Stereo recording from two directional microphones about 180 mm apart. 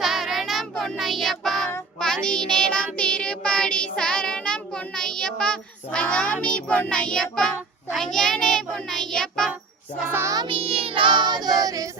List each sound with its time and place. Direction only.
0.0 s child singing: centre (ahead or behind)
10.0 s music: 10° right (ahead or behind)
10.4 s child singing: 30° right (ahead or behind)